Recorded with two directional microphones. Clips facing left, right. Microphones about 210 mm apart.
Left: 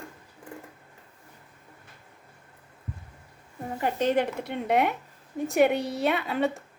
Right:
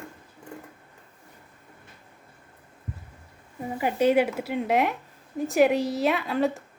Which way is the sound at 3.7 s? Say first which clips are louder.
Right 4 dB; 10° right (ahead or behind).